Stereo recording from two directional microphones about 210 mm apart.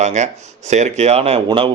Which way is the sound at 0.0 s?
35° right (ahead or behind).